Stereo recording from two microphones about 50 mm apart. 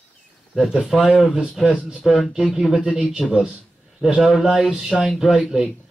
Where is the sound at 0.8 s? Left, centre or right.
Centre.